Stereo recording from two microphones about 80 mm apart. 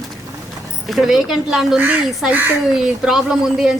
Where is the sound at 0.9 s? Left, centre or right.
Centre.